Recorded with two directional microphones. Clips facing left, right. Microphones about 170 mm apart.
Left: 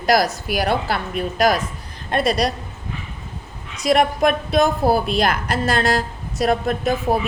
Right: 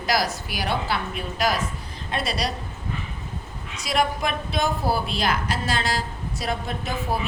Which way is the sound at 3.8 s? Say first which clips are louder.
Left 8 dB; 50° left (ahead or behind).